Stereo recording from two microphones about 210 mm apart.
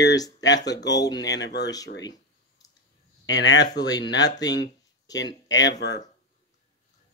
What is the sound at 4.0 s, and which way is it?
Speech, 55° left (ahead or behind).